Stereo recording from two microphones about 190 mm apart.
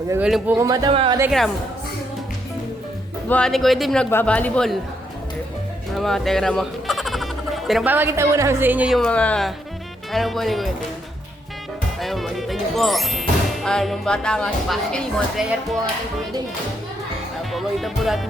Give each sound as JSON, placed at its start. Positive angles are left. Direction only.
{"t": 0.1, "sound": "speech", "side_deg": -5}
{"t": 0.5, "sound": "speech", "side_deg": -15}
{"t": 3.2, "sound": "speech", "side_deg": 5}
{"t": 6.0, "sound": "speech", "side_deg": 0}
{"t": 11.9, "sound": "music", "side_deg": 0}
{"t": 13.7, "sound": "speech", "side_deg": 0}
{"t": 17.5, "sound": "speech", "side_deg": 0}